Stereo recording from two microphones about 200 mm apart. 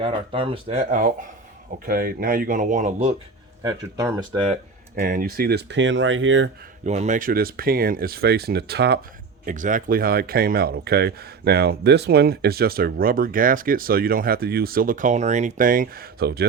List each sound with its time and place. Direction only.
0.0 s speech: 25° right (ahead or behind)
3.6 s speech: 20° right (ahead or behind)
4.9 s speech: 45° right (ahead or behind); by 6.5 s 70° right (ahead or behind)
6.8 s speech: 35° right (ahead or behind); by 9.0 s 55° right (ahead or behind)
9.5 s speech: 40° right (ahead or behind)